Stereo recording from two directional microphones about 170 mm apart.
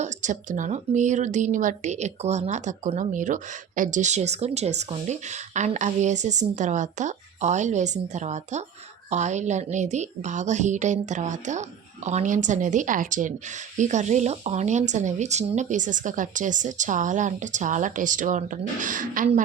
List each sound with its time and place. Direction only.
0.0 s speech: 45° right (ahead or behind)